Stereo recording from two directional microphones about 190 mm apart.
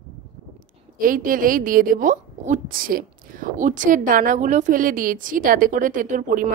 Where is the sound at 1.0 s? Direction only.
45° right (ahead or behind).